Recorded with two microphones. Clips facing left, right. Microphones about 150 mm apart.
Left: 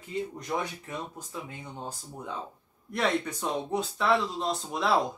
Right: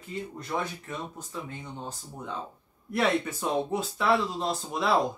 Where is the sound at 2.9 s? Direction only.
5° right (ahead or behind).